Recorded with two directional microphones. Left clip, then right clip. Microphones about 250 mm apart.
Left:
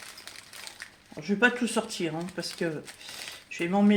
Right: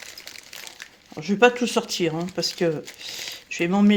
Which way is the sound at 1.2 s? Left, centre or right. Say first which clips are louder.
Right 7 dB; right.